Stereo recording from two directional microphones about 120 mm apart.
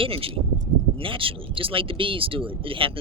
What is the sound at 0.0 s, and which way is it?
Speech, 50° right (ahead or behind).